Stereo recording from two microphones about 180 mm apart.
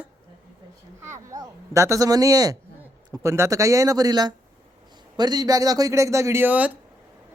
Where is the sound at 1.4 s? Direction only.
15° right (ahead or behind).